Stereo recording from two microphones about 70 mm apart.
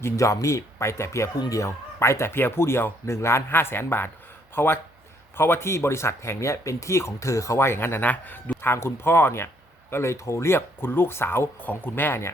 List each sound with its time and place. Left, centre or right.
0.0 s speech: left
11.6 s speech: left